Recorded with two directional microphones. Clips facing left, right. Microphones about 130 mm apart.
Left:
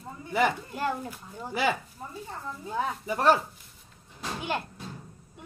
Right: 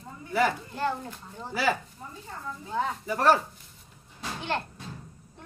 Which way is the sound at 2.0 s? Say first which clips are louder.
Left 2 dB; 30° left (ahead or behind).